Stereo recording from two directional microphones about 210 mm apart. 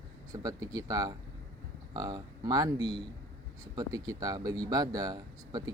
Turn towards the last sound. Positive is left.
turn(degrees=-20)  # may be behind; listen again after turning